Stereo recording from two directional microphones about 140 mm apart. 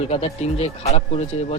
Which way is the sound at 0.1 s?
45° left (ahead or behind).